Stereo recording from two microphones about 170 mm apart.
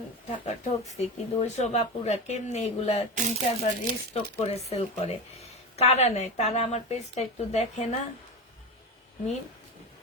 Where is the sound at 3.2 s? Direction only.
45° right (ahead or behind).